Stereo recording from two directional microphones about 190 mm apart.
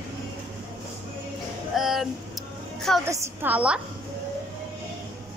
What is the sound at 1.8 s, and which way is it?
Speech, centre (ahead or behind).